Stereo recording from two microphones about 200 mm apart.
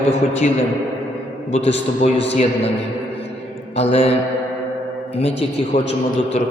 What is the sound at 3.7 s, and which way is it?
Speech, 30° left (ahead or behind).